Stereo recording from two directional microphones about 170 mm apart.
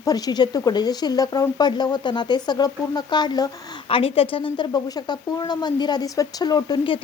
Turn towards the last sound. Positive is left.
turn(degrees=30)  # may be behind; listen again after turning